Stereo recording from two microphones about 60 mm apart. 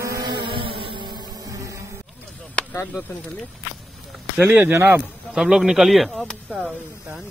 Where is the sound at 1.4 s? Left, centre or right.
Right.